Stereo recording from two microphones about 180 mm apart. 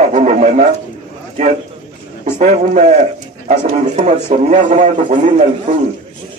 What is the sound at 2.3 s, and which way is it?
A man's voice, 40° right (ahead or behind).